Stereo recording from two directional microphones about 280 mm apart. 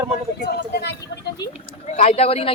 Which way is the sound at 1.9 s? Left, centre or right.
Left.